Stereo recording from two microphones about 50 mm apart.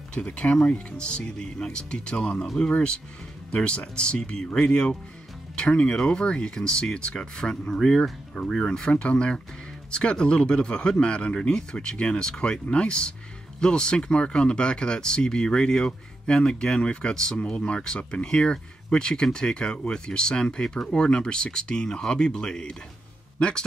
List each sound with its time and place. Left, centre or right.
0.1 s speech: left
2.4 s speech: centre
2.7 s speech: centre